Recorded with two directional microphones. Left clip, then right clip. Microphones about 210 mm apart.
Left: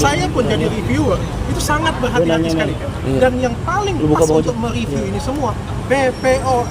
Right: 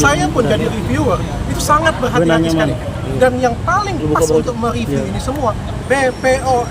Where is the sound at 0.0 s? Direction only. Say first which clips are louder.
Right 3 dB; 15° right (ahead or behind).